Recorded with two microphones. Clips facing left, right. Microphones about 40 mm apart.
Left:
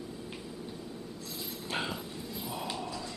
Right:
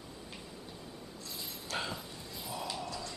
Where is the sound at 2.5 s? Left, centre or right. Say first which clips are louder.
Left 1 dB; centre.